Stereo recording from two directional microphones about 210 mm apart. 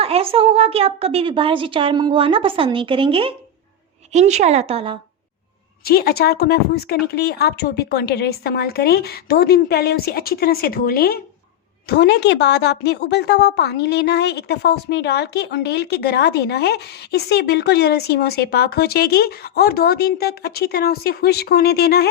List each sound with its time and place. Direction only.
0.0 s a woman's voice: 25° right (ahead or behind)
5.8 s a woman's voice: 45° left (ahead or behind)